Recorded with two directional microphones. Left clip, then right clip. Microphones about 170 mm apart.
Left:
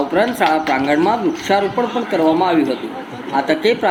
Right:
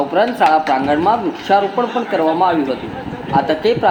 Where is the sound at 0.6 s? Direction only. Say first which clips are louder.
Right 1 dB; 10° left (ahead or behind).